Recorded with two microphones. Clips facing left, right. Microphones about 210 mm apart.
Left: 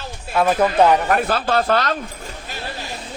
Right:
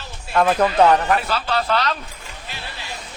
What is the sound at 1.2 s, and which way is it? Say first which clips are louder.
Speech: left 4 dB; 50° left (ahead or behind).